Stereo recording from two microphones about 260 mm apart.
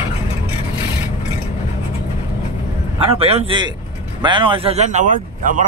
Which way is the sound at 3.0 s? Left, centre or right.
Right.